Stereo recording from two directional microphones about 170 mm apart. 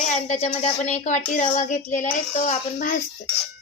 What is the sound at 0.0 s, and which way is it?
Speech, 40° left (ahead or behind).